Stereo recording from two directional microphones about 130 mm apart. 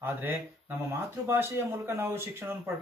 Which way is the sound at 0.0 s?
15° right (ahead or behind).